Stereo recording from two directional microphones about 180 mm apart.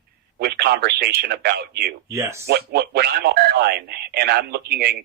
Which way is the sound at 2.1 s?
15° right (ahead or behind).